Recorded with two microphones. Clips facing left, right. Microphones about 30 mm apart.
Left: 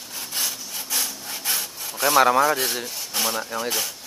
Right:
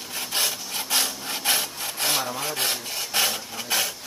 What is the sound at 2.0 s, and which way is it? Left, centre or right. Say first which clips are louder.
Speech: left 11 dB; left.